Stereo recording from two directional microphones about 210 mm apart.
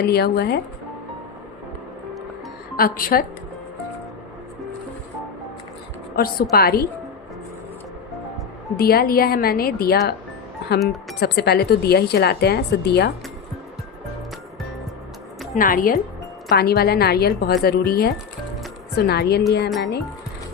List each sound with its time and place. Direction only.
0.0 s a woman's voice: 50° left (ahead or behind)
2.7 s a woman's voice: 45° left (ahead or behind)
6.1 s a woman's voice: 45° left (ahead or behind)
8.7 s a woman's voice: 45° left (ahead or behind)
15.5 s a woman's voice: 40° left (ahead or behind)